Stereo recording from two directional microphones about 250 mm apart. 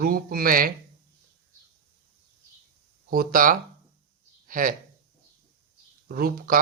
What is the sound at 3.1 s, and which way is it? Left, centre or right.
Speech, right.